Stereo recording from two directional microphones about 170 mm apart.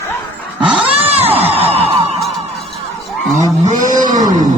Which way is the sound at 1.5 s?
35° right (ahead or behind).